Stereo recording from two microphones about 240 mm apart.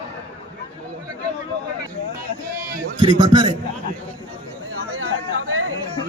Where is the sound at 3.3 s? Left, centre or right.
Right.